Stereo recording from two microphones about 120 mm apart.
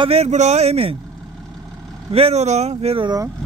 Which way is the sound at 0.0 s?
60° right (ahead or behind).